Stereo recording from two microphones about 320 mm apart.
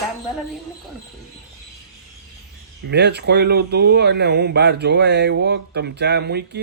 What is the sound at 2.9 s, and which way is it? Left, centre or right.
Speech, right.